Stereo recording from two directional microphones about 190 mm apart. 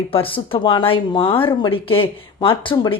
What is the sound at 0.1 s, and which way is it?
A woman's voice, 30° left (ahead or behind).